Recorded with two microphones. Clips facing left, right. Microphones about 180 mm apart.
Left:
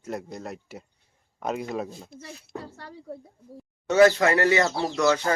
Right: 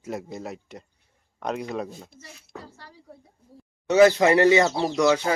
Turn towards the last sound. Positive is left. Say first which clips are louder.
# right 2 dB
turn(degrees=-15)  # may be behind; listen again after turning